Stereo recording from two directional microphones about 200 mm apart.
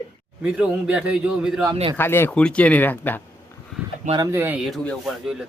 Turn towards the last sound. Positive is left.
turn(degrees=0)  # may be behind; listen again after turning